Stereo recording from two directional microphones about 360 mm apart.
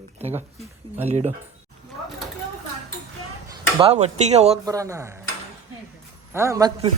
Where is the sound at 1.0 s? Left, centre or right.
Centre.